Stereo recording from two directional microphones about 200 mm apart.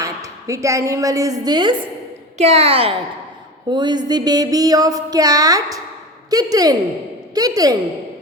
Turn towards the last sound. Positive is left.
turn(degrees=-20)  # may be behind; listen again after turning